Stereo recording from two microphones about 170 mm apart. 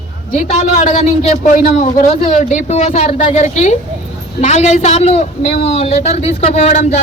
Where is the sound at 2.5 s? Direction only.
45° left (ahead or behind).